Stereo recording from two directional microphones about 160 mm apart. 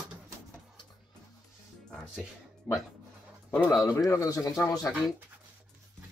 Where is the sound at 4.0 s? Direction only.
20° left (ahead or behind).